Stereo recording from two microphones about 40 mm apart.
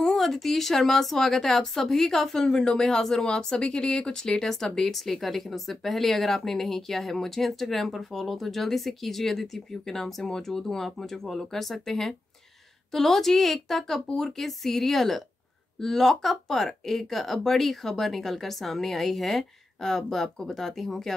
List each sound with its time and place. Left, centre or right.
0.0 s speech: centre